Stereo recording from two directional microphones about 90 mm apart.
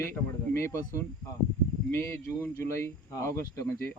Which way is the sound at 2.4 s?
30° left (ahead or behind).